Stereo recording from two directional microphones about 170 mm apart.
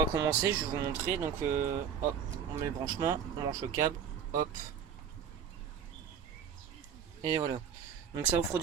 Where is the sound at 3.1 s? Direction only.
25° right (ahead or behind).